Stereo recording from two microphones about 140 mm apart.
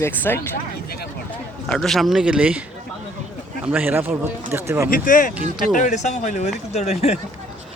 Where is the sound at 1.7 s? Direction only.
Centre (ahead or behind).